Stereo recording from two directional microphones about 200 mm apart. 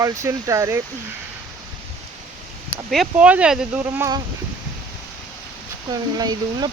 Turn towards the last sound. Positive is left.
turn(degrees=-20)  # may be behind; listen again after turning